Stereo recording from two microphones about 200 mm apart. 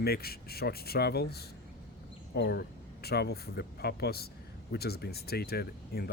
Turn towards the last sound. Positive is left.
turn(degrees=50)  # may be behind; listen again after turning